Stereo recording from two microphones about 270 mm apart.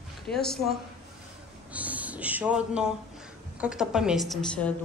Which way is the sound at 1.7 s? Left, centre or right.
Centre.